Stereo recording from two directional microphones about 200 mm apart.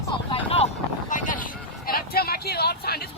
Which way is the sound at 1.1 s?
40° left (ahead or behind).